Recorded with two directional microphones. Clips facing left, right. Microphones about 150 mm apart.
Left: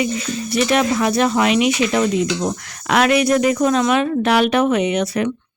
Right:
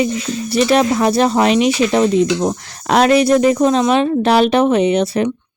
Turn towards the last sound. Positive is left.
turn(degrees=-30)  # may be behind; listen again after turning